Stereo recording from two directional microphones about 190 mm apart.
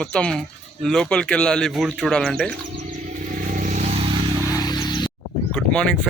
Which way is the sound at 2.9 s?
40° right (ahead or behind).